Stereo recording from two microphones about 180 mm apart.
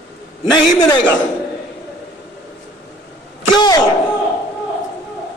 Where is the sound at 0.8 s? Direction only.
25° left (ahead or behind).